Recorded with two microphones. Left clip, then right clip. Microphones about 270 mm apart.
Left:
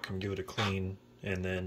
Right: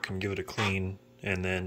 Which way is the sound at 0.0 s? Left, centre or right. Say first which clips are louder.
Right 4 dB; centre.